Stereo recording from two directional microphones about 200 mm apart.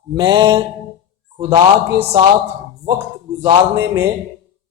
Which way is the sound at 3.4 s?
15° right (ahead or behind).